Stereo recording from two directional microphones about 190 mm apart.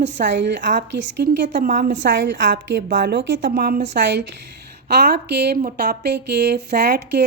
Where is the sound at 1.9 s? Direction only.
75° right (ahead or behind).